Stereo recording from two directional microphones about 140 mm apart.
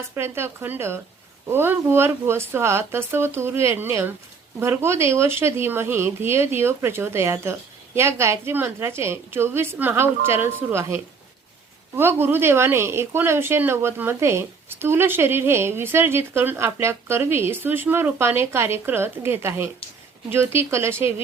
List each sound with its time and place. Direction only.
0.2 s a woman's voice: 15° right (ahead or behind)